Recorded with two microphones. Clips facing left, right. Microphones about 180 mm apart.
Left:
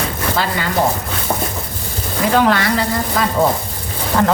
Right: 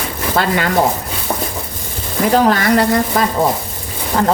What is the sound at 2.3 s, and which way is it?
Speech, 40° right (ahead or behind).